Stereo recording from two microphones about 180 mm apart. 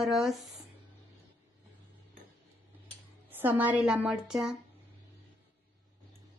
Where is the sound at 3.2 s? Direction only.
10° right (ahead or behind).